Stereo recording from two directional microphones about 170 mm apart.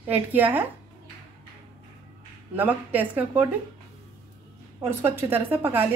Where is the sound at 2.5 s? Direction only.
10° right (ahead or behind).